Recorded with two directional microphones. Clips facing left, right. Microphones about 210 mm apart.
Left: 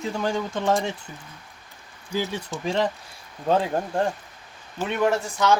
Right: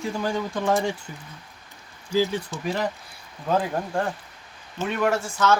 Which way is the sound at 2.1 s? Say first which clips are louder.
Right 4 dB; 25° left (ahead or behind).